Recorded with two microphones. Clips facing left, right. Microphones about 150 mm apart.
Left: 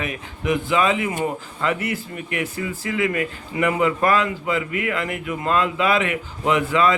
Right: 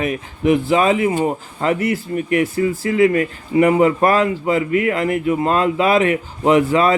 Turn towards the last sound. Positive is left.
turn(degrees=-35)  # may be behind; listen again after turning